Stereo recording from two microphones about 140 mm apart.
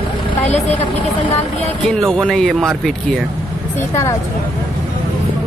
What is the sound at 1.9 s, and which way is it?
Speech, 5° left (ahead or behind).